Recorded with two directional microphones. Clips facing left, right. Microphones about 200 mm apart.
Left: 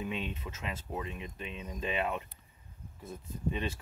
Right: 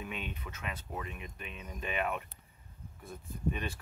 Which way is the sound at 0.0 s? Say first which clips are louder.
Left 4 dB; 25° left (ahead or behind).